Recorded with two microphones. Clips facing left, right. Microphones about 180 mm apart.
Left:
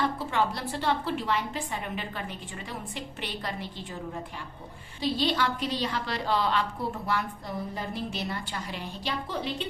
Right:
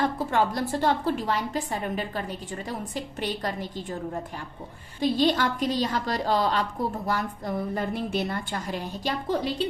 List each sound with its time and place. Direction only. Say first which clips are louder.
0.0 s a woman's voice: right 3 dB; 45° right (ahead or behind)
4.9 s a woman's voice: right 5 dB; 50° right (ahead or behind)